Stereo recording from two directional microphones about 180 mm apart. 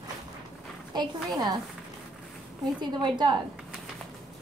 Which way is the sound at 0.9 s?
25° right (ahead or behind).